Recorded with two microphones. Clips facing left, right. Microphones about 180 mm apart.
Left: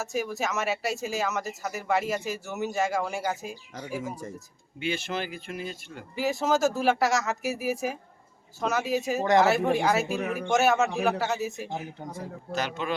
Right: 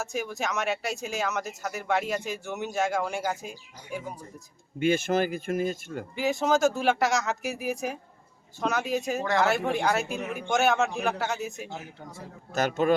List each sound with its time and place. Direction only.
0.0 s speech: centre (ahead or behind)
4.8 s speech: 45° right (ahead or behind)
6.1 s speech: centre (ahead or behind)
12.5 s speech: 45° right (ahead or behind)